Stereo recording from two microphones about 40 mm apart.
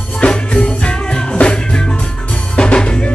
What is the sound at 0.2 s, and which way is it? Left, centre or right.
Music, left.